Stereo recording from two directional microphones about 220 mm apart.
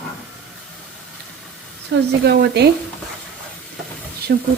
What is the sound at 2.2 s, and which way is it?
Speech, 50° right (ahead or behind).